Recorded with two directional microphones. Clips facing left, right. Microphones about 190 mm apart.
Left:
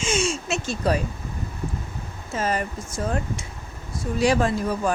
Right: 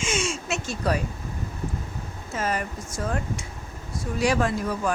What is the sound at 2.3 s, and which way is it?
Speech, 30° left (ahead or behind).